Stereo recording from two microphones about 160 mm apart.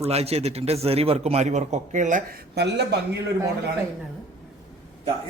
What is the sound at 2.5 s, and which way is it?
Speech, 90° right.